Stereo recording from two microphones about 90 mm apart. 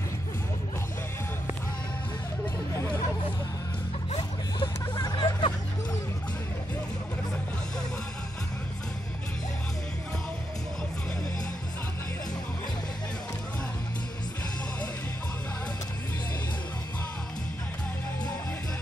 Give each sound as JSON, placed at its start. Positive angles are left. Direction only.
{"t": 4.2, "sound": "hubbub", "side_deg": 55}